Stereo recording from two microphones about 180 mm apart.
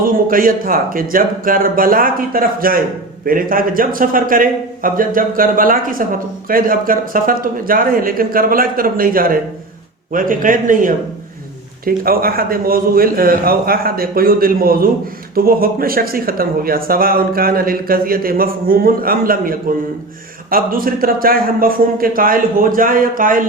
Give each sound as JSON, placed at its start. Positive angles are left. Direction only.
{"t": 0.0, "sound": "a man's voice", "side_deg": -50}